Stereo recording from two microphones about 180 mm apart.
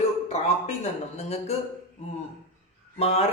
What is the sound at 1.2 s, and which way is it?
Speech, 35° left (ahead or behind).